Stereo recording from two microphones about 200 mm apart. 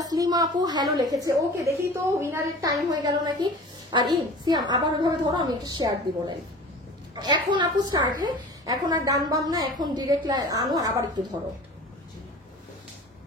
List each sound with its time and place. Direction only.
0.0 s a woman's voice: 20° right (ahead or behind)